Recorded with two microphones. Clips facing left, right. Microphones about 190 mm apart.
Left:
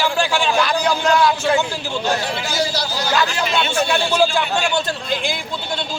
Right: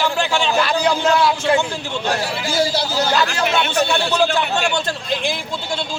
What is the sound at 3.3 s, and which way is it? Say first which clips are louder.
Speech: right 1 dB; 60° right (ahead or behind).